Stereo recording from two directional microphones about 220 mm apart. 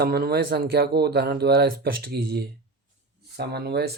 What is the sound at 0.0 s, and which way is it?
Speech, 45° right (ahead or behind).